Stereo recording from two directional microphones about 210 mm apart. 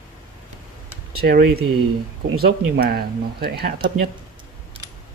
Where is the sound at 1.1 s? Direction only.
50° right (ahead or behind).